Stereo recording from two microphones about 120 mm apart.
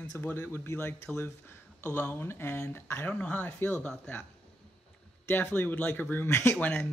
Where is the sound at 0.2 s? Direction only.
20° left (ahead or behind).